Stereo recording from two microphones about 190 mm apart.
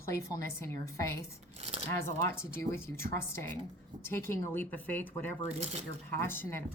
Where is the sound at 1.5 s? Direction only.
35° right (ahead or behind).